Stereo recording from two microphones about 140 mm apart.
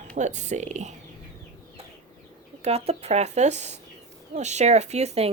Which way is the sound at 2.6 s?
50° right (ahead or behind).